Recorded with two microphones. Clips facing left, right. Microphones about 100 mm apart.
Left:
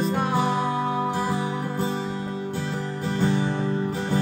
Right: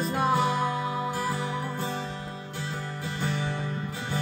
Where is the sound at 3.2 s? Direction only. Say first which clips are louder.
Left 7 dB; 30° left (ahead or behind).